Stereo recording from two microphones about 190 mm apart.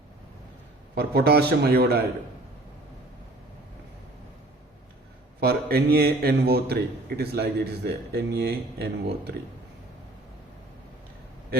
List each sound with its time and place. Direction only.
0.9 s a man's voice: 55° right (ahead or behind)
5.4 s a man's voice: 55° right (ahead or behind)